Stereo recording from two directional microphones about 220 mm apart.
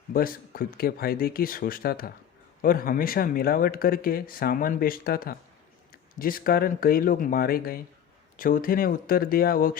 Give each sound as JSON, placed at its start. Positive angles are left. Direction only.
{"t": 0.1, "sound": "speech", "side_deg": 40}